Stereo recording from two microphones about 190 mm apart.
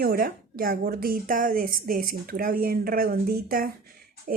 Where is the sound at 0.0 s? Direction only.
50° right (ahead or behind).